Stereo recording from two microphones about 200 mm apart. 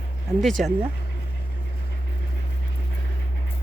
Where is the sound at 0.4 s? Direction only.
Centre (ahead or behind).